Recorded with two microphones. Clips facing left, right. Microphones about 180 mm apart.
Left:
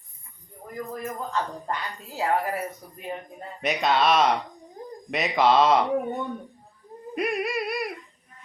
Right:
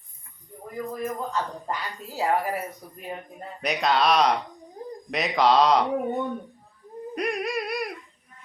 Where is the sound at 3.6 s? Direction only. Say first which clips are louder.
Even; centre (ahead or behind).